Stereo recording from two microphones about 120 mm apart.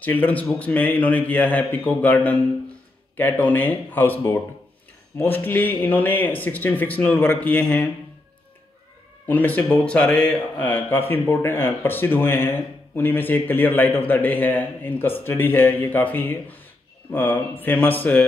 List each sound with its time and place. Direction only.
0.0 s a man's voice: 15° left (ahead or behind)
9.3 s a man's voice: 15° left (ahead or behind)